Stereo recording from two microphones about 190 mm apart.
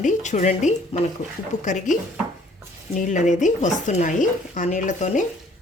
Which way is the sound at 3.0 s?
40° left (ahead or behind).